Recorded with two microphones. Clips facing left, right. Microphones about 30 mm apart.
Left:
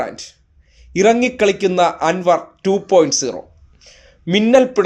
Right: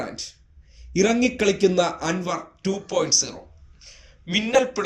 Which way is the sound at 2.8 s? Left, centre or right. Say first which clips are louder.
Left 13 dB; centre.